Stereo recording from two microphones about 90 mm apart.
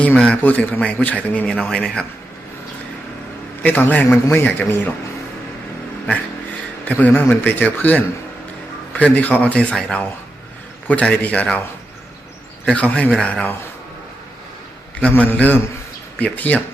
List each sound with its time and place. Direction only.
0.0 s a man's voice: 10° left (ahead or behind)
3.6 s a man's voice: 20° left (ahead or behind)
6.8 s a man's voice: 20° left (ahead or behind)
12.6 s a man's voice: 15° left (ahead or behind)
15.0 s a man's voice: 20° left (ahead or behind)